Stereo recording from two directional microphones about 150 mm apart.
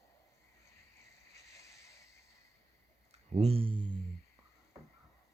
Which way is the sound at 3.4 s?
40° right (ahead or behind).